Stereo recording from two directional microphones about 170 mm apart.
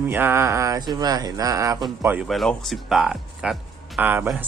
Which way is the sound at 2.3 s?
Centre (ahead or behind).